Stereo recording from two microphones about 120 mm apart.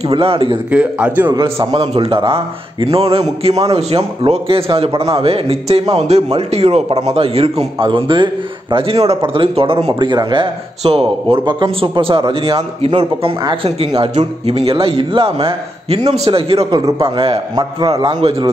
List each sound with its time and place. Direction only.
0.1 s a man's voice: 50° right (ahead or behind)
0.7 s a man's voice: 10° right (ahead or behind)
1.3 s a man's voice: 45° right (ahead or behind)
8.7 s a man's voice: 55° right (ahead or behind)
17.6 s a man's voice: 40° right (ahead or behind)